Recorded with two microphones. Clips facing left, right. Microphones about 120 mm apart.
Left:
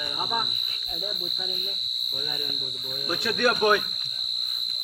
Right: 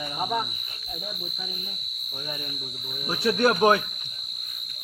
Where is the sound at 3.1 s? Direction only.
30° right (ahead or behind).